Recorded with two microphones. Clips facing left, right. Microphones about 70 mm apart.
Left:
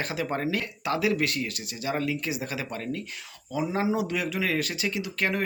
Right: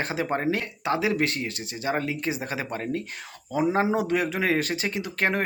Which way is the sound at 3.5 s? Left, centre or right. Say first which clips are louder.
Right 4 dB; right.